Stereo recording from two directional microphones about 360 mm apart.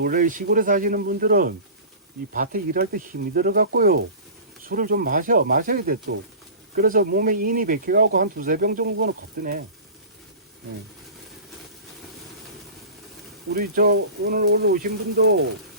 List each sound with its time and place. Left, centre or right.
0.0 s speech: right
13.5 s speech: right